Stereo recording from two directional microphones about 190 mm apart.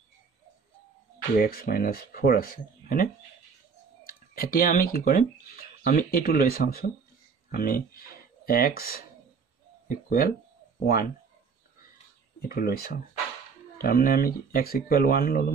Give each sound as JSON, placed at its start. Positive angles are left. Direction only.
{"t": 1.4, "sound": "speech", "side_deg": 50}
{"t": 12.4, "sound": "speech", "side_deg": 55}